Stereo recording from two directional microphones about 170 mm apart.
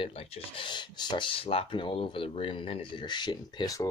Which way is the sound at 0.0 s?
35° left (ahead or behind).